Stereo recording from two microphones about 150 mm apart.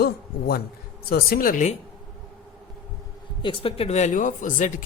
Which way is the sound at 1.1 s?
75° left (ahead or behind).